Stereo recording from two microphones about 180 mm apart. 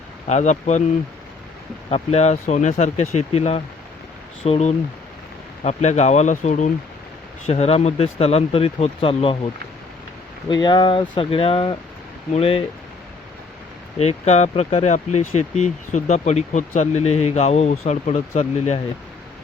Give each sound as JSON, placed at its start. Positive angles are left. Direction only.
{"t": 0.3, "sound": "speech", "side_deg": 40}
{"t": 1.9, "sound": "speech", "side_deg": 35}
{"t": 10.5, "sound": "speech", "side_deg": 25}
{"t": 14.0, "sound": "speech", "side_deg": 35}